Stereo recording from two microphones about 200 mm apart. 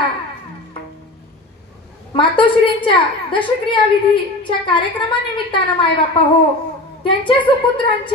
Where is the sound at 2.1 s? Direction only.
25° left (ahead or behind).